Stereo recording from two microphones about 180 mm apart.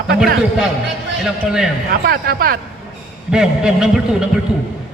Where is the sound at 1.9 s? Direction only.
55° right (ahead or behind).